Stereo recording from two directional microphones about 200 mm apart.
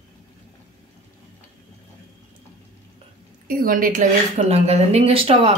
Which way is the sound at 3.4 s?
45° right (ahead or behind).